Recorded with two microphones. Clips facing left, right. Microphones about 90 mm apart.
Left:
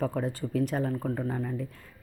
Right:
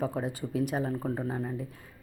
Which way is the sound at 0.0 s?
10° right (ahead or behind).